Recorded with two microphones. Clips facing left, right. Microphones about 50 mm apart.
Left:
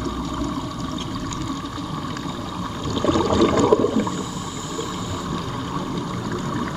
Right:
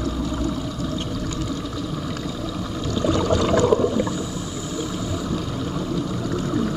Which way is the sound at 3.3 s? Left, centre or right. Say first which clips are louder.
Left 1 dB; left.